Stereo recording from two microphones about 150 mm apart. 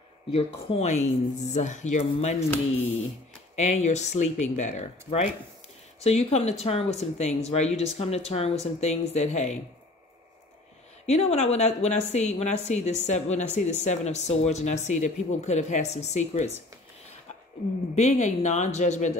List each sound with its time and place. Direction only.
0.3 s speech: 45° left (ahead or behind)
3.5 s speech: 50° left (ahead or behind)
11.1 s speech: 45° left (ahead or behind)
17.9 s speech: 50° left (ahead or behind)